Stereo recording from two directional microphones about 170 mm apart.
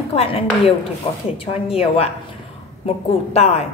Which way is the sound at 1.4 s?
35° left (ahead or behind).